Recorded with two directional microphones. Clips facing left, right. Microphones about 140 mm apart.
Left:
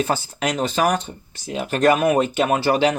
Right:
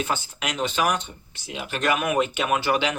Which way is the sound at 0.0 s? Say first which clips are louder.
Left 6 dB; 35° left (ahead or behind).